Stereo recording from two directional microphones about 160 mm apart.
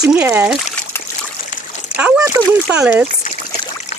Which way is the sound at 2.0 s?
5° right (ahead or behind).